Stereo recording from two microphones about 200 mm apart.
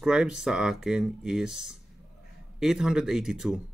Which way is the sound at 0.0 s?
5° right (ahead or behind).